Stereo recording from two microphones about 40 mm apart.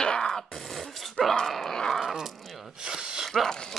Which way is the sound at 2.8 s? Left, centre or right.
Centre.